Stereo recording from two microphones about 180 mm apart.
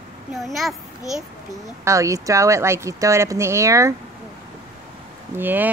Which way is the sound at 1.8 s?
15° right (ahead or behind).